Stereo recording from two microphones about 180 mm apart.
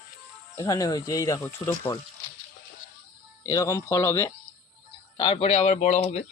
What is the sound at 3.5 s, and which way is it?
Speech, 15° left (ahead or behind).